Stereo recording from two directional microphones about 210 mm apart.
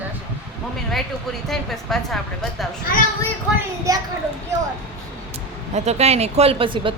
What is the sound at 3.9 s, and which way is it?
Speech, 15° right (ahead or behind).